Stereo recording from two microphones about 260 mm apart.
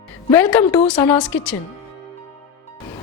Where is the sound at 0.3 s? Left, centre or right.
Centre.